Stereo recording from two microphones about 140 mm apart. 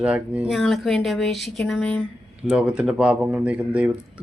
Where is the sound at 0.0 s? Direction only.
5° right (ahead or behind).